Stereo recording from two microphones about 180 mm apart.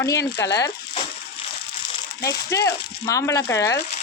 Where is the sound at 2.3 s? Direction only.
20° left (ahead or behind).